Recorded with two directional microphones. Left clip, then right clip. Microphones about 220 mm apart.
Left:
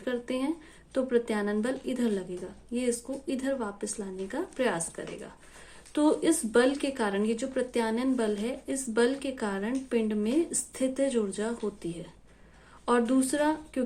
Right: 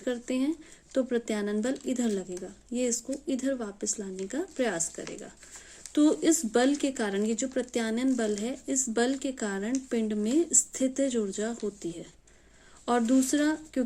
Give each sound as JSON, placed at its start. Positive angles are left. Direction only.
{"t": 0.0, "sound": "speech", "side_deg": -40}